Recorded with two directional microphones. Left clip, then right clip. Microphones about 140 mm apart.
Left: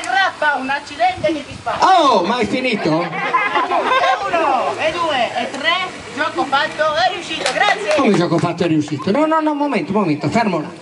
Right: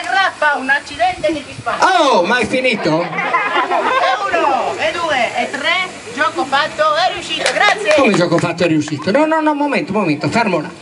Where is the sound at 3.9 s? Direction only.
25° left (ahead or behind).